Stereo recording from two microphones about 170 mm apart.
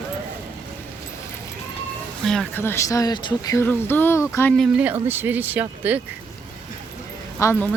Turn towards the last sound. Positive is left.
turn(degrees=15)  # may be behind; listen again after turning